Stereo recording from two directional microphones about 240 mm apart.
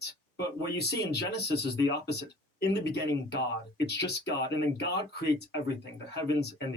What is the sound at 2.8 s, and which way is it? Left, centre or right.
Speech, left.